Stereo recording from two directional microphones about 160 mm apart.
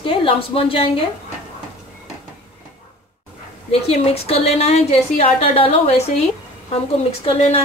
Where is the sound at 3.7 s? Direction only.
40° left (ahead or behind).